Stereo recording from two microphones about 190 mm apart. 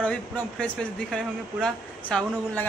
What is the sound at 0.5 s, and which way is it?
A man's voice, 5° left (ahead or behind).